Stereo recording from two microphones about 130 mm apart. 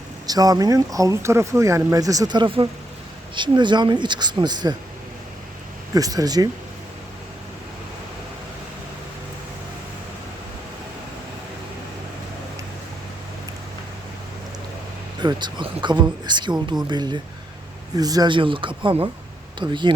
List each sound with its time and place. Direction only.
0.3 s speech: 30° right (ahead or behind)
5.9 s speech: 30° right (ahead or behind)
15.2 s speech: 35° right (ahead or behind)